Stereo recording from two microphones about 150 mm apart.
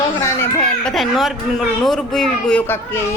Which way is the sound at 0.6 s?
5° left (ahead or behind).